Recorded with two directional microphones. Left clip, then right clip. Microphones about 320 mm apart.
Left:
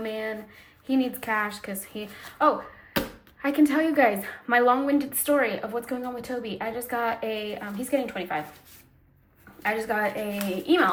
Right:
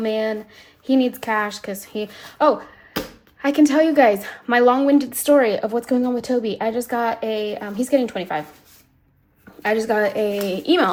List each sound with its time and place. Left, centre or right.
0.0 s a woman's voice: centre
9.6 s a woman's voice: centre